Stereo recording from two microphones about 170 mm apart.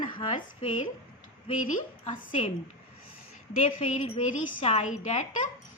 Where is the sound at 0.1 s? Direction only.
30° left (ahead or behind).